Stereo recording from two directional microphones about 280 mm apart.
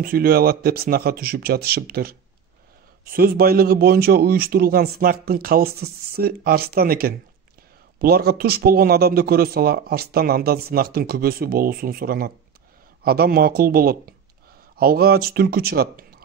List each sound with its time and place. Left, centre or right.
0.0 s speech: right